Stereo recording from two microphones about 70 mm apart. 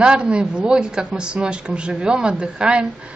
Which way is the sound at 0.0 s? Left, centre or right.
Centre.